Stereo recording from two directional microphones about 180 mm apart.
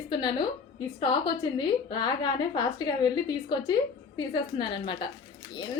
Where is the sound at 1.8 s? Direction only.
25° left (ahead or behind).